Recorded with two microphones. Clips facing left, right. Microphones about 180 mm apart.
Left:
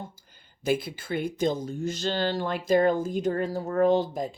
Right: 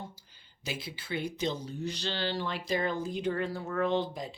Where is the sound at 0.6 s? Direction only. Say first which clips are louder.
Left 12 dB; 50° left (ahead or behind).